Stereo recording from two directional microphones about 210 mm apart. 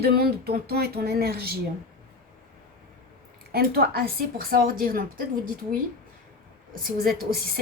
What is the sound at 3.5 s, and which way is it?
A woman's voice, 45° right (ahead or behind).